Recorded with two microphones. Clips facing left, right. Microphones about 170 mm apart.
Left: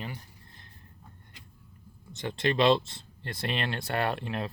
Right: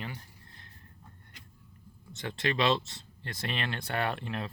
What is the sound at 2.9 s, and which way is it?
Speech, 30° left (ahead or behind).